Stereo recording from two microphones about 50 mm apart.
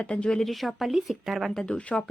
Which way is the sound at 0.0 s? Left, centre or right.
Left.